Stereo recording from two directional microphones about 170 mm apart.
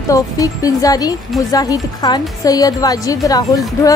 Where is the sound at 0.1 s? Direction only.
20° left (ahead or behind).